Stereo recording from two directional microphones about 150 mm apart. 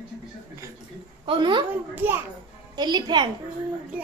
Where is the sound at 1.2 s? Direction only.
35° right (ahead or behind).